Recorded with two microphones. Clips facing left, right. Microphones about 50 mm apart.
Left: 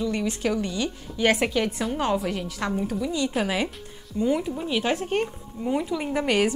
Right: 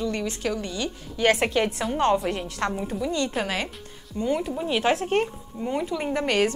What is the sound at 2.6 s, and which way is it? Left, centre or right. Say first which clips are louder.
Speech: right 2 dB; centre.